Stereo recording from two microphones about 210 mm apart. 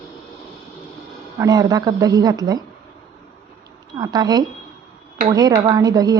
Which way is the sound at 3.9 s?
20° right (ahead or behind).